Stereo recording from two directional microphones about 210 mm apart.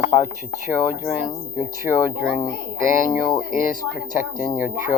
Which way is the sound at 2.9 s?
40° left (ahead or behind).